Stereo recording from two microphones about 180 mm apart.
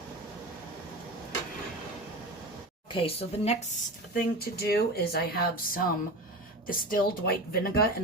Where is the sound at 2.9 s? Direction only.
30° left (ahead or behind).